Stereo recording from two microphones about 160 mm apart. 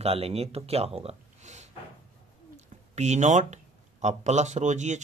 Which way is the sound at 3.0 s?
45° right (ahead or behind).